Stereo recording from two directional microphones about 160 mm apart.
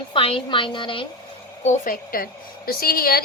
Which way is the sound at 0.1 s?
35° left (ahead or behind).